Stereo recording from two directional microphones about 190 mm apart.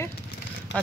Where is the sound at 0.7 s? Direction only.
70° left (ahead or behind).